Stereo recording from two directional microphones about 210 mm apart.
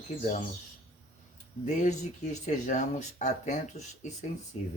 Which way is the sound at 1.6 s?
35° left (ahead or behind).